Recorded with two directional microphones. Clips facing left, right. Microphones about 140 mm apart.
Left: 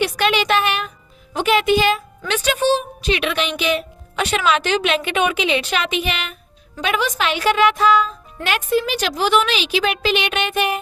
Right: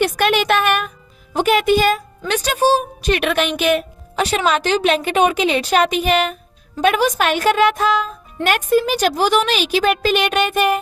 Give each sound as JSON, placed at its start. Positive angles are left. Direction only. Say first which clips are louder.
{"t": 0.0, "sound": "a sound", "louder": "right 2 dB", "side_deg": -50}
{"t": 1.3, "sound": "speech", "louder": "right 2 dB", "side_deg": -40}
{"t": 4.1, "sound": "a woman's voice", "louder": "right 1 dB", "side_deg": -35}